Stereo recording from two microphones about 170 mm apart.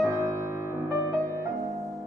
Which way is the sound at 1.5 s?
Centre (ahead or behind).